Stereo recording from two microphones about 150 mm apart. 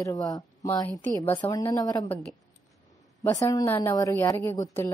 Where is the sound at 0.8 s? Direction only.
15° left (ahead or behind).